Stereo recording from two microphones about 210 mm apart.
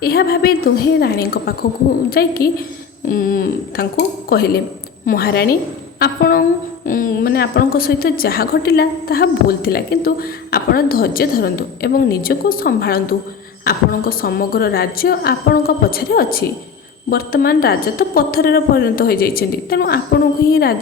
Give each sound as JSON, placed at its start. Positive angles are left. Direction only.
{"t": 0.0, "sound": "a woman's voice", "side_deg": 45}